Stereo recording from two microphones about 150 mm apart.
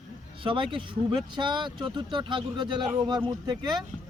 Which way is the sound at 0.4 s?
35° right (ahead or behind).